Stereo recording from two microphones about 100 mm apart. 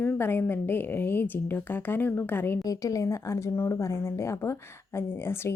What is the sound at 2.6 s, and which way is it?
Speech, 35° left (ahead or behind).